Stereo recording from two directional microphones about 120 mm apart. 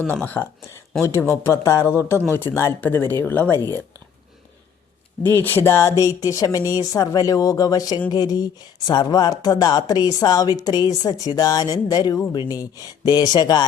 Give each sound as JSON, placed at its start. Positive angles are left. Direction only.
{"t": 0.1, "sound": "speech", "side_deg": 15}
{"t": 5.2, "sound": "speech", "side_deg": 15}